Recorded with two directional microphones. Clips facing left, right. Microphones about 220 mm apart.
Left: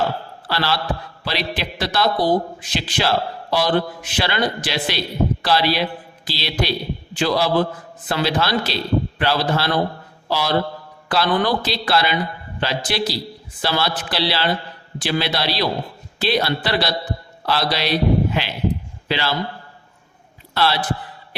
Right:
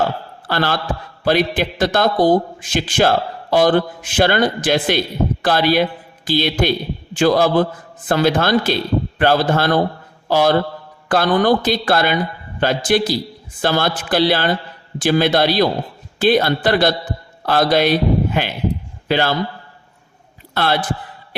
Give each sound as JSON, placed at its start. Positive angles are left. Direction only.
{"t": 0.4, "sound": "a man's voice", "side_deg": -50}
{"t": 20.5, "sound": "a man's voice", "side_deg": -50}